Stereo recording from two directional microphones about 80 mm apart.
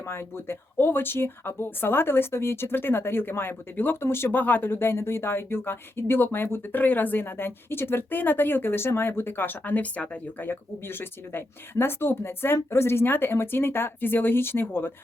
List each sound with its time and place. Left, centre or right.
0.0 s speech: left; by 10.2 s centre
10.4 s speech: left